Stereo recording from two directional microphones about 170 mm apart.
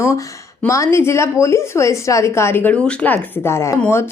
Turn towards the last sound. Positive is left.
turn(degrees=15)  # may be behind; listen again after turning